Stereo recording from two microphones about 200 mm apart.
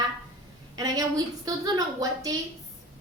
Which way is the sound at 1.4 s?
20° right (ahead or behind).